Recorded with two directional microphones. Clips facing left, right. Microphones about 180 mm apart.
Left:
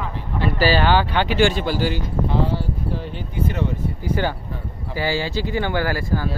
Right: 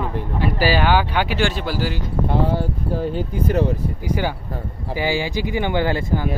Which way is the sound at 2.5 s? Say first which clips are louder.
Right 3 dB; 50° right (ahead or behind).